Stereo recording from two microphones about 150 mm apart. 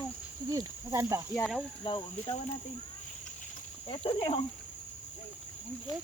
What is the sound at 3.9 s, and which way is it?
Speech, 40° left (ahead or behind).